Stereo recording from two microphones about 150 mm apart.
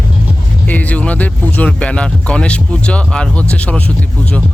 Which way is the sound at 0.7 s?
10° left (ahead or behind).